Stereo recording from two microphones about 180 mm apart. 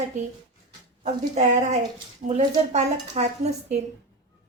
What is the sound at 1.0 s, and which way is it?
A woman's voice, 35° right (ahead or behind).